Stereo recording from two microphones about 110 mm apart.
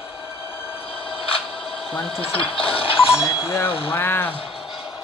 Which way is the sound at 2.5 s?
55° left (ahead or behind).